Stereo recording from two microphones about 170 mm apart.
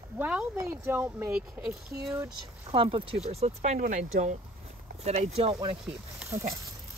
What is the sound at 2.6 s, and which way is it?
Speech, 35° right (ahead or behind).